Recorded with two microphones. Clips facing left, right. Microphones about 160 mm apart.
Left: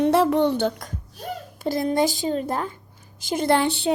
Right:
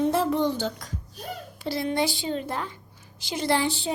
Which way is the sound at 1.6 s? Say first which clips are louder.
Left 5 dB; 45° left (ahead or behind).